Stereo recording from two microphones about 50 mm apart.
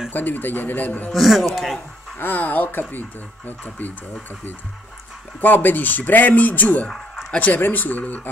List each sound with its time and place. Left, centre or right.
0.1 s speech: left
1.1 s speech: centre
2.1 s speech: left
5.4 s speech: left